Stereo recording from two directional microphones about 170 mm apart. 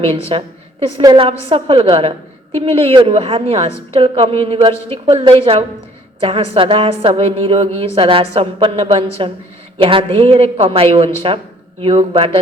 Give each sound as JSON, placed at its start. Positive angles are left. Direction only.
{"t": 0.0, "sound": "a woman's voice", "side_deg": -35}